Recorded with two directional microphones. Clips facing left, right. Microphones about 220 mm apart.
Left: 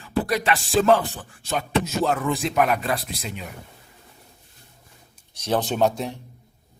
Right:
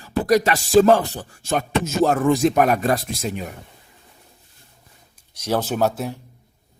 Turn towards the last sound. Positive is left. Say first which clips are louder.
# right 1 dB
turn(degrees=-5)  # may be behind; listen again after turning